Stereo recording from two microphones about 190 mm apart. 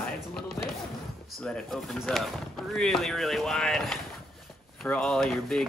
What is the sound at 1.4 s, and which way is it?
Speech, 5° left (ahead or behind).